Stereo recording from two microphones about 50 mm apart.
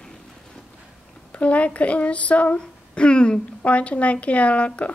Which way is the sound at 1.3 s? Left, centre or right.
Left.